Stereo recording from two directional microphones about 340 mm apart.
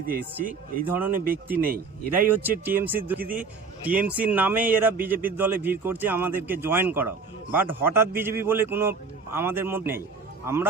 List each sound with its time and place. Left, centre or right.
0.4 s speech: right
0.9 s a man's voice: centre
1.1 s speech: right
2.1 s a man's voice: centre